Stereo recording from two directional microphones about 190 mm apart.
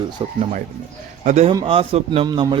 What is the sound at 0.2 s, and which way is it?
Speech, 30° right (ahead or behind).